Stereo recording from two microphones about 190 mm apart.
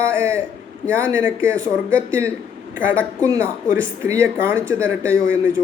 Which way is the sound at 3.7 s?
15° right (ahead or behind).